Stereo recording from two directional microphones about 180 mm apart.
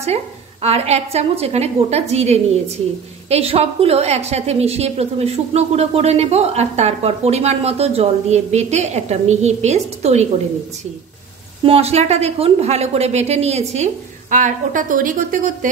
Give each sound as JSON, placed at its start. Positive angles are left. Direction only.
{"t": 0.0, "sound": "a woman's voice", "side_deg": -35}
{"t": 11.6, "sound": "a woman's voice", "side_deg": -35}